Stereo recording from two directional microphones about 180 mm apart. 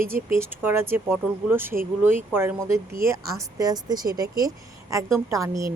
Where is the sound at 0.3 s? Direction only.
15° right (ahead or behind).